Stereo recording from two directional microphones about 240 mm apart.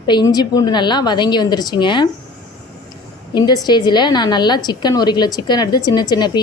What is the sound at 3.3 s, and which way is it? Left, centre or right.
A woman's voice, centre.